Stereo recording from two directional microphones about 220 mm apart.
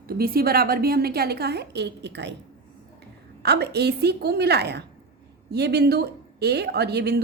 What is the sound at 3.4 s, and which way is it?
A woman's voice, 50° right (ahead or behind).